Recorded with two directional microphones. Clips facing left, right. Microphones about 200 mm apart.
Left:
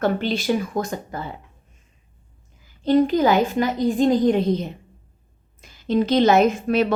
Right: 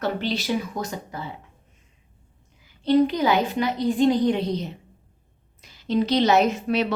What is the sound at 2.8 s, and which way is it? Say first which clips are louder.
A woman's voice: left 2 dB; 45° left (ahead or behind).